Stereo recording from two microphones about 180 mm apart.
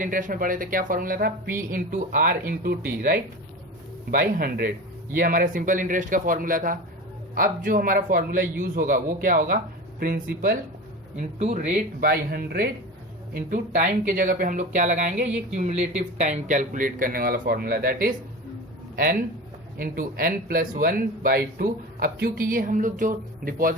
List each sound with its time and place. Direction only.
0.0 s speech: 45° right (ahead or behind)
13.3 s speech: 45° right (ahead or behind)
19.8 s speech: 50° right (ahead or behind)